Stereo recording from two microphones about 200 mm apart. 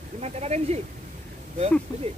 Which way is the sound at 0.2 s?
30° right (ahead or behind).